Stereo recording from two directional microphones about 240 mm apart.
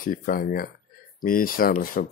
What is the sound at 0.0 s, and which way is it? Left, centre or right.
Speech, left.